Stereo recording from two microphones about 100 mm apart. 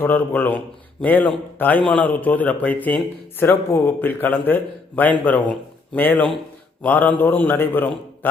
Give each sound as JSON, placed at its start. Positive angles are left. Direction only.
{"t": 0.0, "sound": "a man's voice", "side_deg": 20}